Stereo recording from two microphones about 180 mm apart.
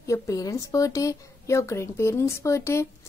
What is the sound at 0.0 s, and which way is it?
Speech, 20° left (ahead or behind).